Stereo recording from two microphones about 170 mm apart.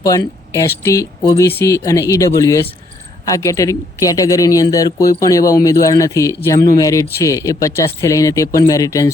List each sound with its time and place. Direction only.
0.1 s speech: 20° left (ahead or behind)